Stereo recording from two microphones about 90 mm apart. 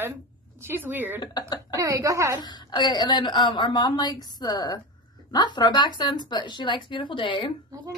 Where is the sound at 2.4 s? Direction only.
50° left (ahead or behind); by 7.5 s 70° left (ahead or behind).